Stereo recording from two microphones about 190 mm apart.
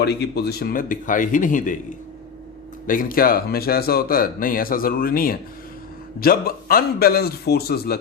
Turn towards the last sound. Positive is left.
turn(degrees=55)  # may be behind; listen again after turning